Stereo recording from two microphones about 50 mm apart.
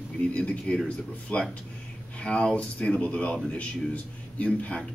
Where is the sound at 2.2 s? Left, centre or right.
Centre.